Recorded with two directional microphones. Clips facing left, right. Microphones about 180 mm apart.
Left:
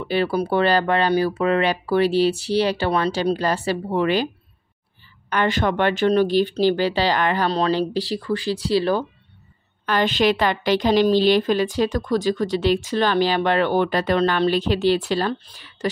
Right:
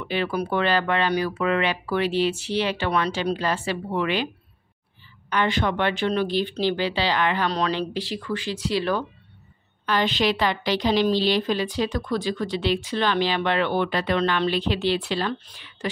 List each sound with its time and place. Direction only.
0.0 s speech: 35° left (ahead or behind)
5.3 s speech: 45° left (ahead or behind)
9.8 s a woman's voice: 50° left (ahead or behind)